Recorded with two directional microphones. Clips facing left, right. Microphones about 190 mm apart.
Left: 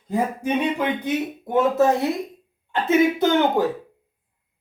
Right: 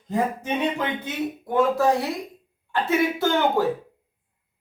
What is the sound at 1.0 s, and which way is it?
Speech, 20° left (ahead or behind).